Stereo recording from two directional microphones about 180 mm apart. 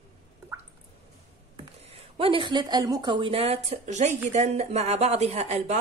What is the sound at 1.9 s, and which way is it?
Speech, 30° right (ahead or behind).